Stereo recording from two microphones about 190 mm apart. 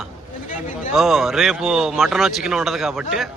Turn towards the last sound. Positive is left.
turn(degrees=0)  # may be behind; listen again after turning